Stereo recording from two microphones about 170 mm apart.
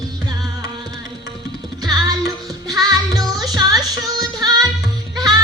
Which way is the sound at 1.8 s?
20° right (ahead or behind).